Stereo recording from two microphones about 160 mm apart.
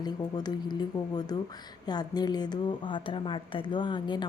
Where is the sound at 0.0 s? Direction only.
25° left (ahead or behind).